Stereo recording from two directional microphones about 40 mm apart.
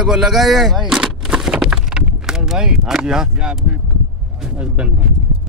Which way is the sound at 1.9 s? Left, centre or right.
Right.